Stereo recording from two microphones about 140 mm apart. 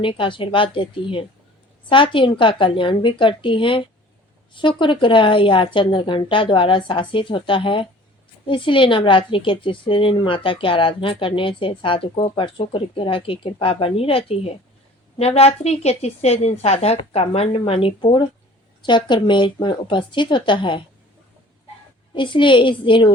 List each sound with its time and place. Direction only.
0.0 s a woman's voice: 40° left (ahead or behind)
22.1 s a woman's voice: 35° left (ahead or behind)